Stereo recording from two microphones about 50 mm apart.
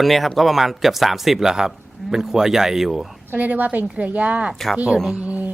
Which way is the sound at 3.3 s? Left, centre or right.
Right.